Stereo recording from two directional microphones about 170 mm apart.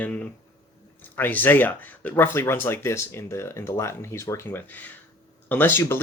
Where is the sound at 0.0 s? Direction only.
10° left (ahead or behind).